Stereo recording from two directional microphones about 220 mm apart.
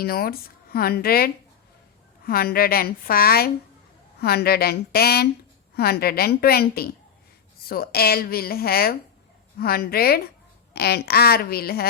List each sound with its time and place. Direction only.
0.0 s speech: 45° left (ahead or behind)